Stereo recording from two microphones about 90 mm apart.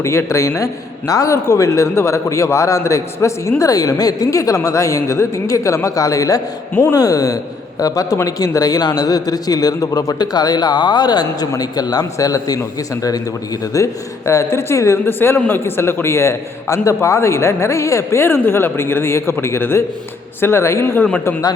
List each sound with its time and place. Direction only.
0.0 s a man's voice: 30° left (ahead or behind)
13.7 s speech: 35° left (ahead or behind)